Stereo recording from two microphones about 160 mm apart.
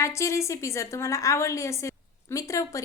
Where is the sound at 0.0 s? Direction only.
20° left (ahead or behind).